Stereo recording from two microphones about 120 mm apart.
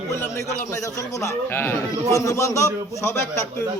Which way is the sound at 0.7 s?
25° left (ahead or behind).